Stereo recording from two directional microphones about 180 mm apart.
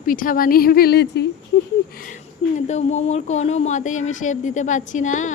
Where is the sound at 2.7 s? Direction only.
40° left (ahead or behind).